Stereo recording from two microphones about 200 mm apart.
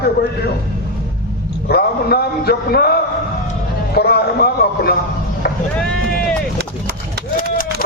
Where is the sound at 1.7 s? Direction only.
50° left (ahead or behind).